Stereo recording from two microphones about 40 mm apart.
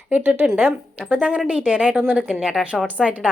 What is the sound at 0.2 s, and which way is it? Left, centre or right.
Speech, right.